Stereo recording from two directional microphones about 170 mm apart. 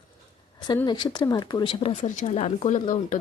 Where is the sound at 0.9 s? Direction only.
25° left (ahead or behind).